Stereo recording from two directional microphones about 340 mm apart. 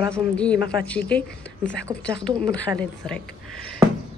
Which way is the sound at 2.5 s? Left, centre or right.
Centre.